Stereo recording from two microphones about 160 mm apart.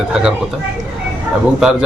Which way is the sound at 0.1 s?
5° right (ahead or behind).